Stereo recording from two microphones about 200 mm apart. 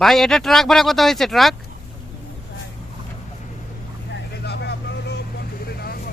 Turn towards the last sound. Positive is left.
turn(degrees=50)  # may be behind; listen again after turning